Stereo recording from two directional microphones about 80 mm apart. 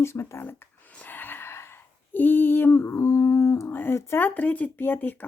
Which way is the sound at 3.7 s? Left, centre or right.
Left.